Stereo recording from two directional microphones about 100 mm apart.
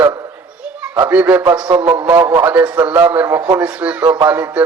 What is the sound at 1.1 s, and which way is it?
A man's voice, 20° right (ahead or behind).